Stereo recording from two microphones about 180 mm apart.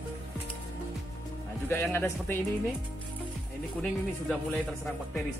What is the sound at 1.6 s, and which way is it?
Speech, 10° left (ahead or behind).